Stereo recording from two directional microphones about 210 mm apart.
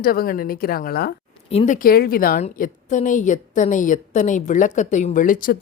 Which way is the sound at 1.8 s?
45° left (ahead or behind).